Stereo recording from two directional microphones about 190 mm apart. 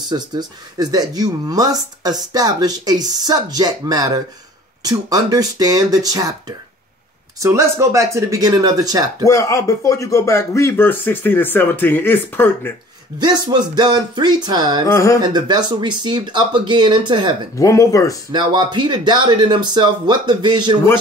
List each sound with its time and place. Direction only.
0.1 s speech: 20° right (ahead or behind)
9.3 s speech: 15° left (ahead or behind)
13.2 s speech: 25° right (ahead or behind)
14.9 s speech: 15° left (ahead or behind)
15.2 s speech: 20° right (ahead or behind)
17.6 s speech: 15° left (ahead or behind)
18.3 s speech: 25° right (ahead or behind)